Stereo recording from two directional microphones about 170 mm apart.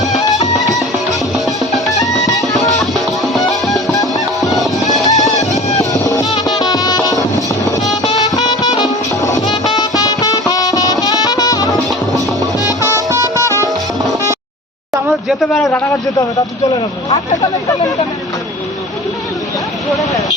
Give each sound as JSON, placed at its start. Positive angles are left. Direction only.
{"t": 0.4, "sound": "music", "side_deg": 20}
{"t": 1.5, "sound": "music", "side_deg": 0}
{"t": 3.7, "sound": "music", "side_deg": 0}
{"t": 3.9, "sound": "music", "side_deg": 20}
{"t": 4.6, "sound": "music", "side_deg": 0}
{"t": 5.0, "sound": "music", "side_deg": 20}
{"t": 5.4, "sound": "music", "side_deg": 40}
{"t": 5.9, "sound": "music", "side_deg": 20}
{"t": 12.8, "sound": "music", "side_deg": -15}
{"t": 15.3, "sound": "a sound", "side_deg": 0}